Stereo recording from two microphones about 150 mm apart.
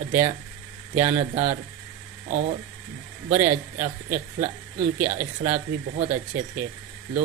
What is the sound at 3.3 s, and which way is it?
A woman's voice, 50° right (ahead or behind).